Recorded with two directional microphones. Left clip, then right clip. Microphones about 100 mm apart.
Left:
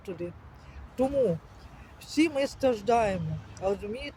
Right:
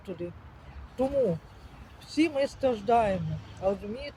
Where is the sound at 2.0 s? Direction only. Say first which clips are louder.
Even; 30° left (ahead or behind).